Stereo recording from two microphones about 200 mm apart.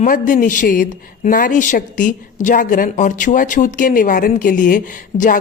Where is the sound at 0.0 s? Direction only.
40° left (ahead or behind).